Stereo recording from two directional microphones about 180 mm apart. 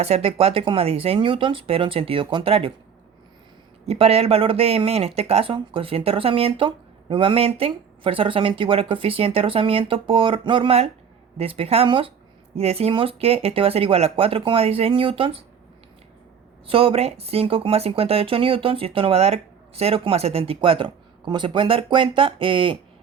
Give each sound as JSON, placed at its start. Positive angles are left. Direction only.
{"t": 0.0, "sound": "speech", "side_deg": -35}
{"t": 3.8, "sound": "speech", "side_deg": -35}
{"t": 16.6, "sound": "speech", "side_deg": -30}